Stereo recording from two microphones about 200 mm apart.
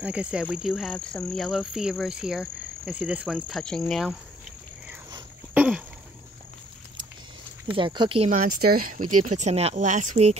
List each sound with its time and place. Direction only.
0.0 s cricket: 5° right (ahead or behind)
5.5 s a sound: 5° right (ahead or behind)
7.6 s speech: 25° right (ahead or behind)
8.3 s speech: 45° right (ahead or behind)